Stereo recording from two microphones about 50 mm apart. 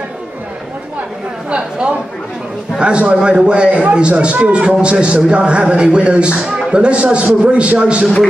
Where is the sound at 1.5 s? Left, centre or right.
Right.